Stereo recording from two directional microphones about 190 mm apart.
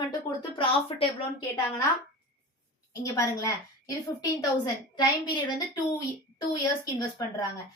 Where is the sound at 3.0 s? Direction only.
15° left (ahead or behind).